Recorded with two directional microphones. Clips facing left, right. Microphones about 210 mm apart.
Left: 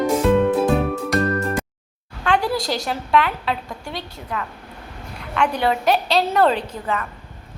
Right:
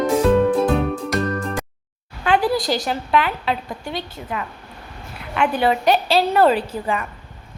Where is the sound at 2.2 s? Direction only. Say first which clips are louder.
Right 2 dB; 5° right (ahead or behind).